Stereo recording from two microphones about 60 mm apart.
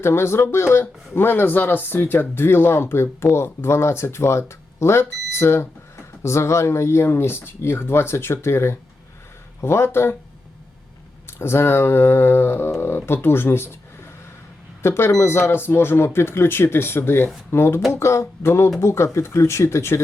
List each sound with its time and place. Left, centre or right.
0.0 s speech: left
11.3 s speech: left
14.8 s speech: left